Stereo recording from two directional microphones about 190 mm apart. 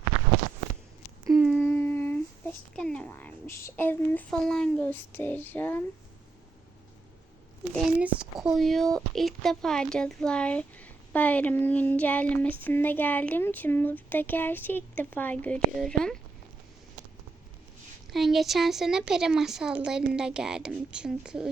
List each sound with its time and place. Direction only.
1.3 s a sound: 5° right (ahead or behind)
1.5 s humming: 10° left (ahead or behind)
2.7 s speech: 5° left (ahead or behind)
7.8 s speech: 5° right (ahead or behind)
18.1 s speech: centre (ahead or behind)